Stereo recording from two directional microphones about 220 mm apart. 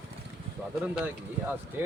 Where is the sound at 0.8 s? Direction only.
5° right (ahead or behind).